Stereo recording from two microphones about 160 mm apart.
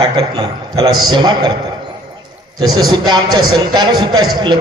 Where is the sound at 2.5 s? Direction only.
25° right (ahead or behind).